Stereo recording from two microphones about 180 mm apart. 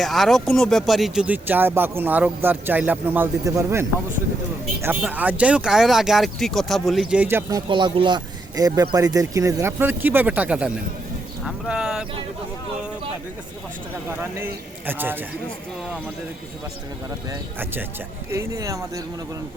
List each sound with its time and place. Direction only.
0.0 s speech: centre (ahead or behind)
7.7 s speech: 25° right (ahead or behind); by 12.0 s 5° right (ahead or behind)
14.2 s speech: 10° right (ahead or behind)
17.2 s speech: 10° right (ahead or behind)